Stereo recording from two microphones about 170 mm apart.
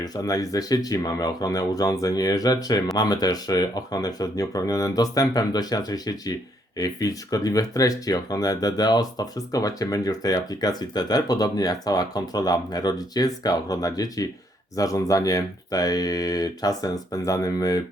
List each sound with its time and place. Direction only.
0.0 s speech: 20° left (ahead or behind)